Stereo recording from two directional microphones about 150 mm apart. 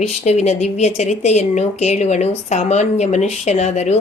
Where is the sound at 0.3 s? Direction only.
50° left (ahead or behind).